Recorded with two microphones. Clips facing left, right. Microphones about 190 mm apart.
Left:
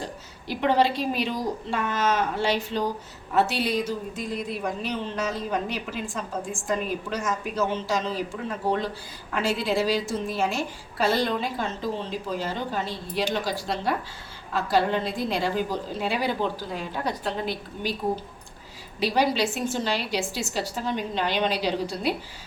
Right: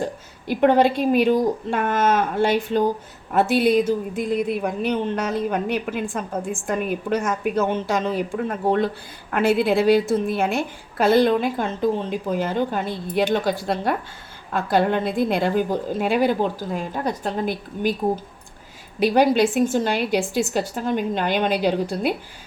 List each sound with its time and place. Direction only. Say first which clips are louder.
0.0 s a woman's voice: right 8 dB; 50° right (ahead or behind)
18.9 s a woman's voice: right 7 dB; 50° right (ahead or behind)